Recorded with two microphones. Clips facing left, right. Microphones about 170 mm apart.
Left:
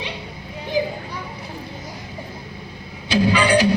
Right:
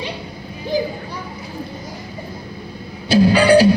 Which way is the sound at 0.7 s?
35° right (ahead or behind).